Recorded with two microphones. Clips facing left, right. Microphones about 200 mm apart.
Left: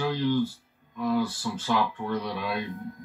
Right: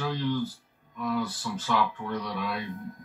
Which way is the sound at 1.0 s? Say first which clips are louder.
Left 4 dB; 30° left (ahead or behind).